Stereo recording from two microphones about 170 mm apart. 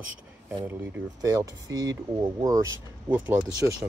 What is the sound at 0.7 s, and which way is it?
Speech, 10° right (ahead or behind).